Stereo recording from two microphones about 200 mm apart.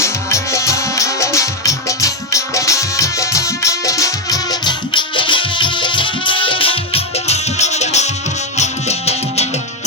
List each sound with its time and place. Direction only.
0.0 s music: 15° left (ahead or behind); by 9.5 s 30° left (ahead or behind)